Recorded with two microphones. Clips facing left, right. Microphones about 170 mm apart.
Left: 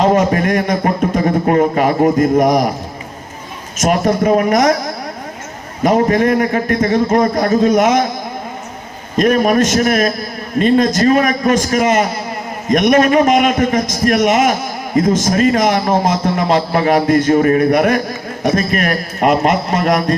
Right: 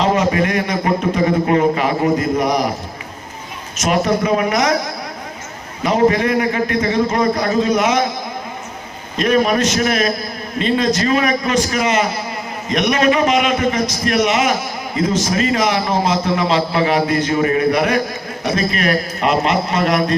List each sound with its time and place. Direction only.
0.0 s a sound: 45° left (ahead or behind)
3.8 s a man's voice: 45° left (ahead or behind)
5.8 s a man's voice: 45° left (ahead or behind)
9.1 s a man's voice: 45° left (ahead or behind)